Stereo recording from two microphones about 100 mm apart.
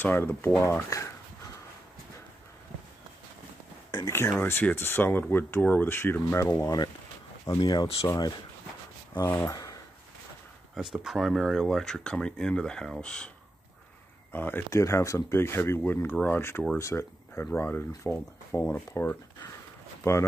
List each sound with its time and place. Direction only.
0.0 s speech: 20° left (ahead or behind)
0.7 s speech: 30° left (ahead or behind)
4.1 s speech: 25° left (ahead or behind)
7.5 s speech: 50° left (ahead or behind)
10.7 s speech: 5° right (ahead or behind)
14.3 s speech: 20° left (ahead or behind)